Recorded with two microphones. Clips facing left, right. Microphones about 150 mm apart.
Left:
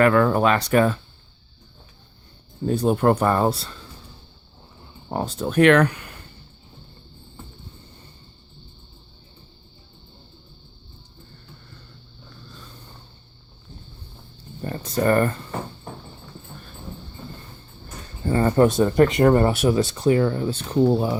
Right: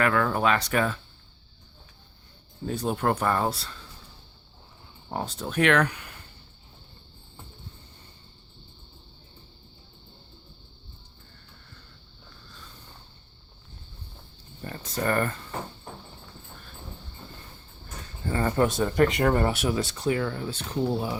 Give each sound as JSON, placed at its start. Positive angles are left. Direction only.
{"t": 0.0, "sound": "speech", "side_deg": 40}
{"t": 2.6, "sound": "speech", "side_deg": 45}
{"t": 5.1, "sound": "speech", "side_deg": 50}
{"t": 14.6, "sound": "speech", "side_deg": 40}
{"t": 18.3, "sound": "speech", "side_deg": 40}
{"t": 20.5, "sound": "speech", "side_deg": 50}